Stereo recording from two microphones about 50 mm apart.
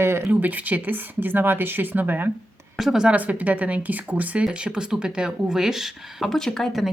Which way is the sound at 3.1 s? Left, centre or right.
Right.